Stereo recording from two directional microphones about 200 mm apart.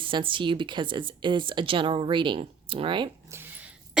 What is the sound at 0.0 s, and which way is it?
Speech, 25° right (ahead or behind).